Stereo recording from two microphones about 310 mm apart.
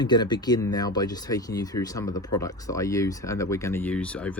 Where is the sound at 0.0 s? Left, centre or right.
Centre.